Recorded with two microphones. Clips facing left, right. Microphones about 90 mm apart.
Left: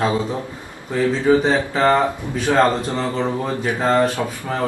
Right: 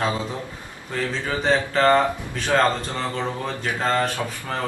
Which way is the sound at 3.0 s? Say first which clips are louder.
Left 5 dB; 20° left (ahead or behind).